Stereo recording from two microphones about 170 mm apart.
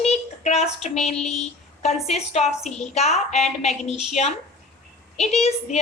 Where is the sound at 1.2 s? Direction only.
40° left (ahead or behind).